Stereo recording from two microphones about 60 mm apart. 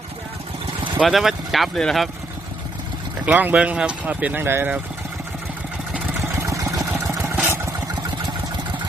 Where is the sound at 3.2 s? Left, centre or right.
Right.